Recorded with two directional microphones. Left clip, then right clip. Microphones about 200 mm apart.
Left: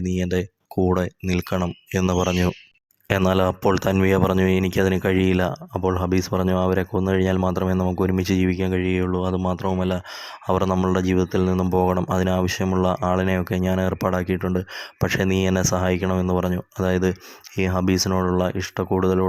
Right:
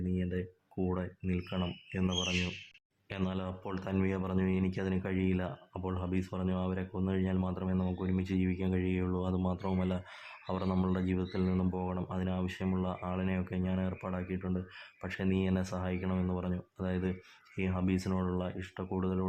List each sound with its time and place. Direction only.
0.9 s speech: 40° left (ahead or behind)